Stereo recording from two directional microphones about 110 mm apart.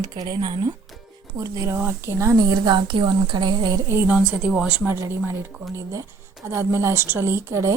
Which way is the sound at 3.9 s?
20° right (ahead or behind).